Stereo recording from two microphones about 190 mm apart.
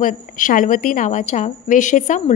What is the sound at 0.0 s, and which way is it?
A woman's voice, 45° left (ahead or behind).